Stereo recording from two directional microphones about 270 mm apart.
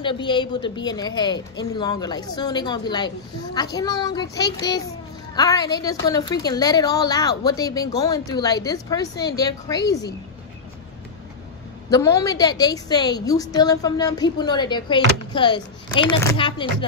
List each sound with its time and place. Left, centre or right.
0.0 s a woman's voice: centre
11.9 s a woman's voice: centre